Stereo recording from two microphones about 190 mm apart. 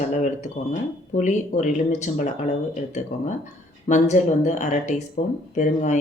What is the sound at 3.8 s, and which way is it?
Speech, 40° left (ahead or behind).